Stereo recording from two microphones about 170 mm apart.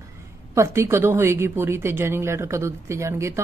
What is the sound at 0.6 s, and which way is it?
Speech, 15° right (ahead or behind).